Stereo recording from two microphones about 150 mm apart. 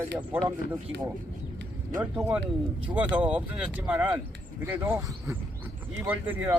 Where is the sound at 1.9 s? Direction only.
10° right (ahead or behind).